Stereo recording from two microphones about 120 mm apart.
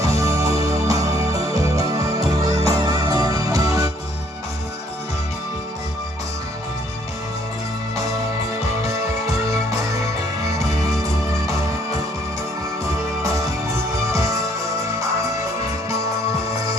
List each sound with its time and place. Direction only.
0.0 s music: 25° right (ahead or behind)